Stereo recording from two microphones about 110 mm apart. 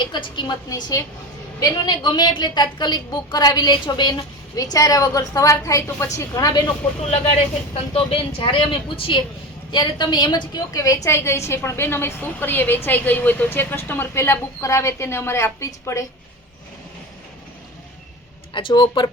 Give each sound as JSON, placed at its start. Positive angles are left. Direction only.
{"t": 0.1, "sound": "speech", "side_deg": 45}
{"t": 0.7, "sound": "a woman's voice", "side_deg": 35}
{"t": 7.1, "sound": "a woman's voice", "side_deg": 70}
{"t": 18.5, "sound": "speech", "side_deg": 45}